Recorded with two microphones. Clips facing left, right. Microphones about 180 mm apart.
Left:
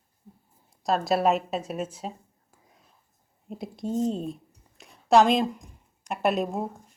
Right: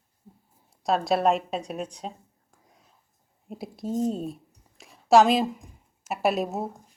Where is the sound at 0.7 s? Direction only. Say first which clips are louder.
Right 1 dB; centre (ahead or behind).